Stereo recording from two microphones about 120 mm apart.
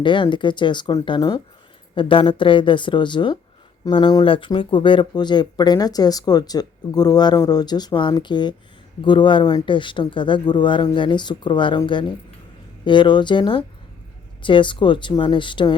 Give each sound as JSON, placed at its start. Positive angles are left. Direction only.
{"t": 0.0, "sound": "speech", "side_deg": 40}